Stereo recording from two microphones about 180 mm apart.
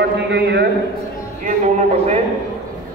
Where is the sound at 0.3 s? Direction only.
70° right (ahead or behind).